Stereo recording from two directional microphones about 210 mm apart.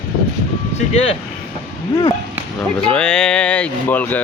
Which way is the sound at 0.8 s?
30° left (ahead or behind).